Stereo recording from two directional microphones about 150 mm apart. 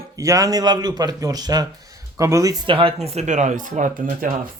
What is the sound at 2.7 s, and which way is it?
Speech, 35° right (ahead or behind).